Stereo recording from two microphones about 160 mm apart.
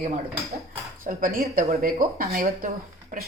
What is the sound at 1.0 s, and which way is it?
Speech, 60° right (ahead or behind).